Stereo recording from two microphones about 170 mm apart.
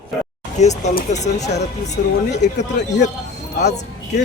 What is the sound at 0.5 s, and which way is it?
Speech, 45° left (ahead or behind).